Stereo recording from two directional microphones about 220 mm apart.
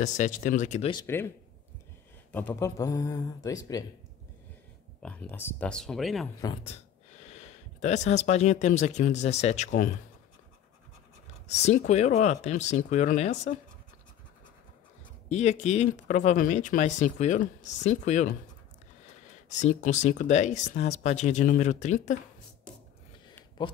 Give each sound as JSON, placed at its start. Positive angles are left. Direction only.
{"t": 0.0, "sound": "speech", "side_deg": 35}
{"t": 2.3, "sound": "speech", "side_deg": 10}
{"t": 5.0, "sound": "speech", "side_deg": 5}
{"t": 6.4, "sound": "speech", "side_deg": 20}
{"t": 11.4, "sound": "speech", "side_deg": 30}
{"t": 15.2, "sound": "speech", "side_deg": 30}
{"t": 19.5, "sound": "speech", "side_deg": 35}